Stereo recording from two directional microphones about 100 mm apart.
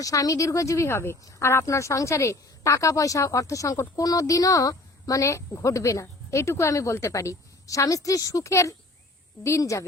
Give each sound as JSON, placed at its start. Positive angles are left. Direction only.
{"t": 0.0, "sound": "speech", "side_deg": 35}